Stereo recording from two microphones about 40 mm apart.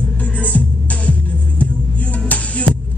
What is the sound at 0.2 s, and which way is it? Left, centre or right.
Music, left.